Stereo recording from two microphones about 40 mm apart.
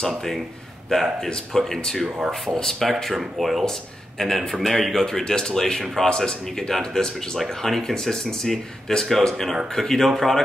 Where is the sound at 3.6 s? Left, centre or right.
Centre.